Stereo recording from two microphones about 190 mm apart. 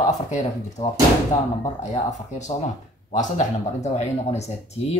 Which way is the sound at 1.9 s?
35° left (ahead or behind).